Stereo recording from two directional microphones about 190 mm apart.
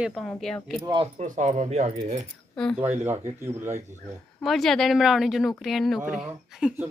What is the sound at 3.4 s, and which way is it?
Speech, 15° right (ahead or behind).